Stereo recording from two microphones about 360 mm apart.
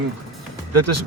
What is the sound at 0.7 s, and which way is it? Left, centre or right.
Speech, right.